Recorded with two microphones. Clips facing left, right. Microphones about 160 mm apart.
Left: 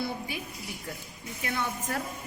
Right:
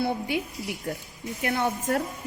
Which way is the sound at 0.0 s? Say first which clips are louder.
Right 7 dB; 65° right (ahead or behind).